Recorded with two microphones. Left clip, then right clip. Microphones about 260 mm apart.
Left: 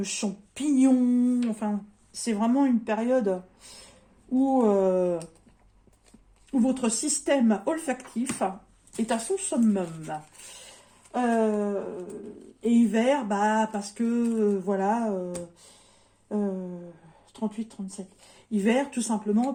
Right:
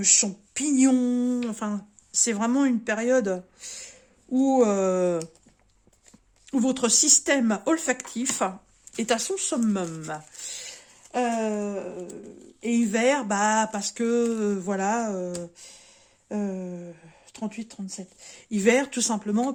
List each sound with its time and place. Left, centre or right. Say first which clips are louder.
0.0 s speech: right 9 dB; right
6.5 s speech: right 3 dB; right
16.3 s speech: left 1 dB; right